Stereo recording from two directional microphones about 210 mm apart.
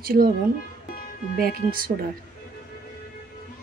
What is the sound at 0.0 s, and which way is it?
Speech, 45° right (ahead or behind).